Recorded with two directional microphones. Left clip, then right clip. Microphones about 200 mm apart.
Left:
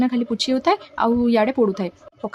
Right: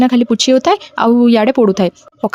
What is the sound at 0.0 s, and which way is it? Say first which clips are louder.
Speech: right 10 dB; 40° right (ahead or behind).